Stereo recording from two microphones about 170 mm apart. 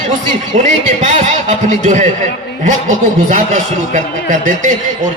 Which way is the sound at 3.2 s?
50° right (ahead or behind).